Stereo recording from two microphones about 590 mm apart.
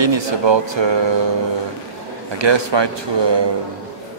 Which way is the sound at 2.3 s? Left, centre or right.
Right.